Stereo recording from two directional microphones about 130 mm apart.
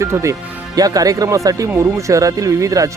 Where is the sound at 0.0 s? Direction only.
20° right (ahead or behind).